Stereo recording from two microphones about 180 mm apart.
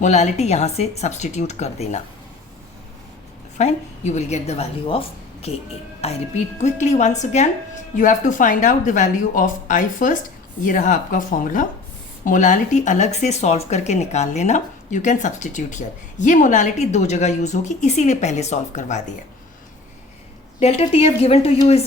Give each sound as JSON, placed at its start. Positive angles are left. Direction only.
{"t": 0.0, "sound": "speech", "side_deg": 40}
{"t": 3.6, "sound": "speech", "side_deg": 40}
{"t": 20.6, "sound": "speech", "side_deg": 35}